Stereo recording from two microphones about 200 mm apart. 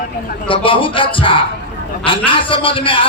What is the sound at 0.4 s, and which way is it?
A man's voice, 25° left (ahead or behind).